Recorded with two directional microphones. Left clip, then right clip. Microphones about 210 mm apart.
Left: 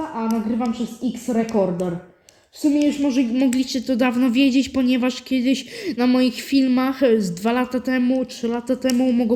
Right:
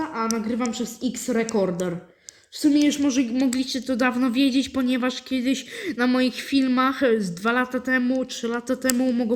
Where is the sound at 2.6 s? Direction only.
20° right (ahead or behind).